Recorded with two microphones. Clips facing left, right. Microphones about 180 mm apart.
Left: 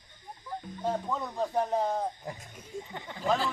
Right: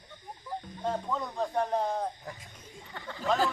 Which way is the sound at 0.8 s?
5° left (ahead or behind).